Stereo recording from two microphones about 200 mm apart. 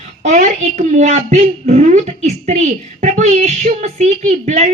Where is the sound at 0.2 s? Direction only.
35° right (ahead or behind).